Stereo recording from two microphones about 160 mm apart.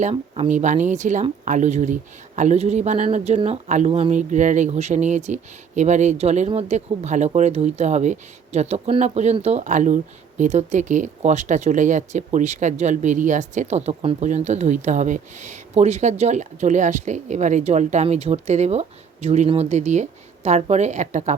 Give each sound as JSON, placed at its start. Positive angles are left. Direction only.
{"t": 0.0, "sound": "speech", "side_deg": -45}